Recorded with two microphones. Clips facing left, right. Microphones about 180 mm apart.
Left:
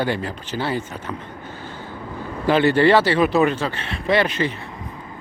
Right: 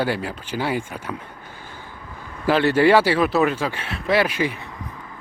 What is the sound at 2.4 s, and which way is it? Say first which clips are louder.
Speech: left 1 dB; centre (ahead or behind).